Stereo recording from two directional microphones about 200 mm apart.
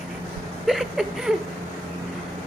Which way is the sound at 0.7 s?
Centre (ahead or behind).